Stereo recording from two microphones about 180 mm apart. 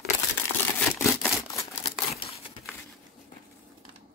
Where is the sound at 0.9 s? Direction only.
15° left (ahead or behind).